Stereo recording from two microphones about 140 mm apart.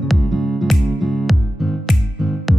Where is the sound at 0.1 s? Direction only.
Centre (ahead or behind).